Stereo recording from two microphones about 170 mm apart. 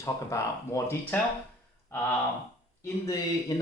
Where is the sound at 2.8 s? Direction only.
15° left (ahead or behind).